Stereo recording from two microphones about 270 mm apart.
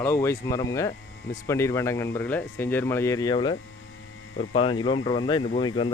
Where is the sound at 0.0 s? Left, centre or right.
Centre.